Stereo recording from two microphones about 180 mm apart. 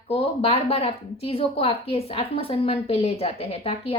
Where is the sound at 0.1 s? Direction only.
35° left (ahead or behind).